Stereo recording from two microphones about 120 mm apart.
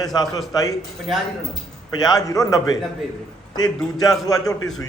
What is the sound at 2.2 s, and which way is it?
Speech, 30° left (ahead or behind).